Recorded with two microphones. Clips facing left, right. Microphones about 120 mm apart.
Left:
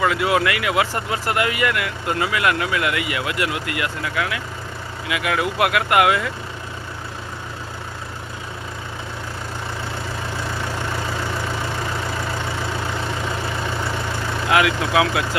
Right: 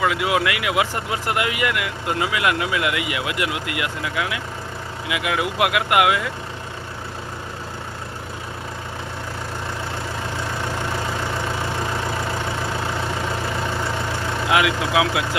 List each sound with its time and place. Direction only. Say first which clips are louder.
0.0 s speech: left 1 dB; 10° right (ahead or behind)
14.5 s speech: left 1 dB; 15° right (ahead or behind)